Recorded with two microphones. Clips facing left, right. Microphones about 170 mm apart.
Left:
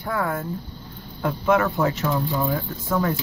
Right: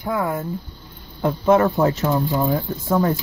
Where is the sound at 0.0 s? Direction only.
15° right (ahead or behind).